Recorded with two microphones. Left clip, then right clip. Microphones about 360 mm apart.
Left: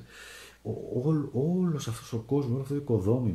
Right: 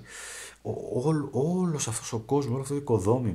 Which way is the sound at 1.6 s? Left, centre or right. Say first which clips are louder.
Right 2 dB; centre.